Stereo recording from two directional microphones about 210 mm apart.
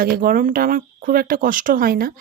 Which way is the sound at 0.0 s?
45° right (ahead or behind).